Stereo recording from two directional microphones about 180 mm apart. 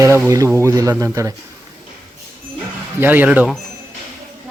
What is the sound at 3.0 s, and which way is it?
Speech, 10° right (ahead or behind).